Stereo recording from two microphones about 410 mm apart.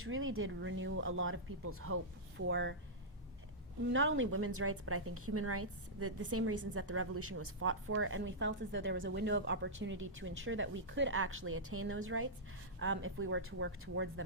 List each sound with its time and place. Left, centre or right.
0.0 s a woman's voice: right
3.8 s a woman's voice: right